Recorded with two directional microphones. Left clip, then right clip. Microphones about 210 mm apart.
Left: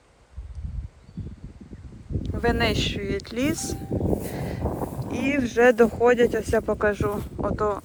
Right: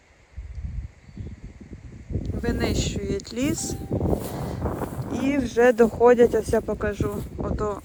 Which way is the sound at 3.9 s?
25° left (ahead or behind).